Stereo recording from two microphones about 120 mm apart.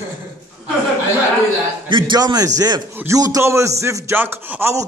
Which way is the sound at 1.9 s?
40° right (ahead or behind).